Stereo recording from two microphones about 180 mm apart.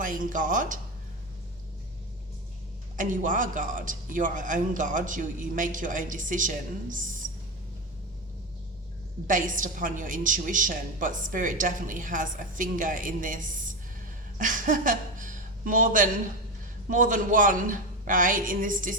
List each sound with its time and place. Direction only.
0.0 s a woman's voice: 45° right (ahead or behind)
2.9 s a woman's voice: 45° right (ahead or behind)
9.2 s a woman's voice: 45° right (ahead or behind)
14.3 s a sound: 45° right (ahead or behind)
16.9 s a woman's voice: 45° right (ahead or behind)